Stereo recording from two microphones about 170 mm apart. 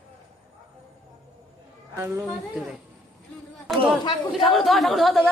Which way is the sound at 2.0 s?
15° right (ahead or behind).